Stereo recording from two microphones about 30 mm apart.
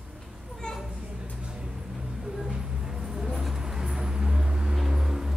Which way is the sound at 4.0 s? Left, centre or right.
Right.